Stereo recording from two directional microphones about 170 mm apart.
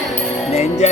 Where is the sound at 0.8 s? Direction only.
40° left (ahead or behind).